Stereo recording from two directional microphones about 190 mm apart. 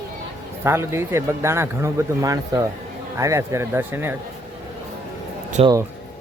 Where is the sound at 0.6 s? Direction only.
15° right (ahead or behind).